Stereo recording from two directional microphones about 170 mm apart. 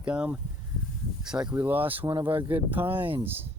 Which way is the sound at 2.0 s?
30° right (ahead or behind).